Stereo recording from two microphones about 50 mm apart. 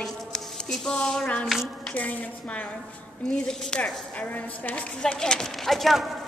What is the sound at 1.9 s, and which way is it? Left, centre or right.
Speech, left.